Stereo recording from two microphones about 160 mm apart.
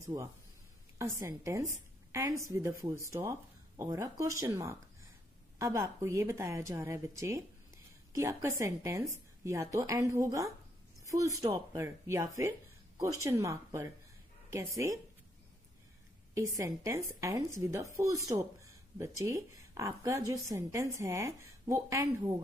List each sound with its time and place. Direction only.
0.0 s a woman's voice: 20° right (ahead or behind)
16.3 s speech: 20° right (ahead or behind)